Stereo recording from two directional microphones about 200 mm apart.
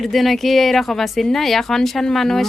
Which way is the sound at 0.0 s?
Centre (ahead or behind).